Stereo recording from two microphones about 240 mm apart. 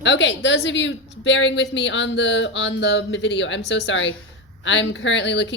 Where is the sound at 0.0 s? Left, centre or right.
Left.